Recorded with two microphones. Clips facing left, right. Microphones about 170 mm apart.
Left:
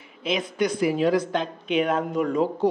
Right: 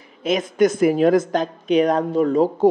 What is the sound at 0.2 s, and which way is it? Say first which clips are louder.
Speech: right 7 dB; 45° right (ahead or behind).